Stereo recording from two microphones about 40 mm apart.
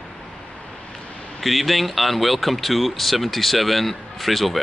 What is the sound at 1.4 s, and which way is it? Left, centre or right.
Speech, centre.